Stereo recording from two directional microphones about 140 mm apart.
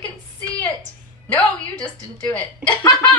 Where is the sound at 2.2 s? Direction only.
10° left (ahead or behind).